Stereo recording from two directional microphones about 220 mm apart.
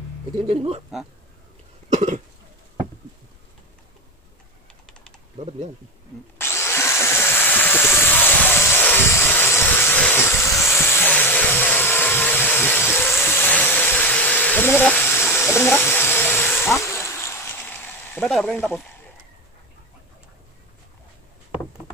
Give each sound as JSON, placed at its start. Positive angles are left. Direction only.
{"t": 0.5, "sound": "speech", "side_deg": -25}
{"t": 1.9, "sound": "cough", "side_deg": -30}
{"t": 6.4, "sound": "drill", "side_deg": 10}
{"t": 13.4, "sound": "a sound", "side_deg": 10}